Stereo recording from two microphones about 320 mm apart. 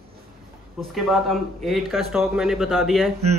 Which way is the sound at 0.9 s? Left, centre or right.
Centre.